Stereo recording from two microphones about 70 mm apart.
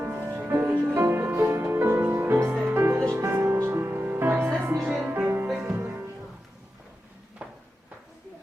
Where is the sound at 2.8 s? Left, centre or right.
Right.